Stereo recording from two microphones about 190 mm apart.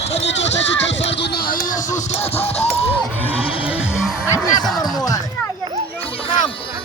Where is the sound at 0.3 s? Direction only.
70° left (ahead or behind).